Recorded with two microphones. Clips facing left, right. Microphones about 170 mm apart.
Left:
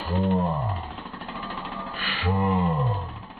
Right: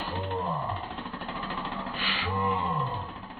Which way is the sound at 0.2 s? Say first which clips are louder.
Left 11 dB; centre (ahead or behind).